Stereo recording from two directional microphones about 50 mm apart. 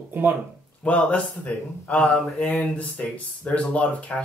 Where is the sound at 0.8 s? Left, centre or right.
Left.